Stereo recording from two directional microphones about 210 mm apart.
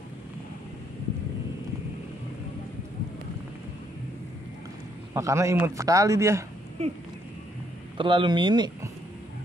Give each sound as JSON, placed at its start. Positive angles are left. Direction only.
{"t": 5.1, "sound": "a man's voice", "side_deg": -15}
{"t": 8.0, "sound": "speech", "side_deg": -25}